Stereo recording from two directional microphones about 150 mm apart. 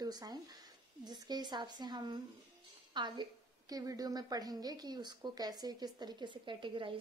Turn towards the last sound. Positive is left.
turn(degrees=-35)  # may be behind; listen again after turning